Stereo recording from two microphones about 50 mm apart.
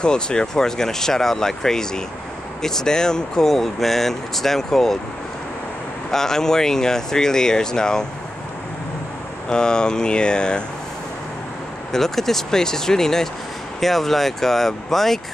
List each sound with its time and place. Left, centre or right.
0.0 s speech: centre
6.1 s speech: centre
9.5 s speech: centre
11.9 s speech: centre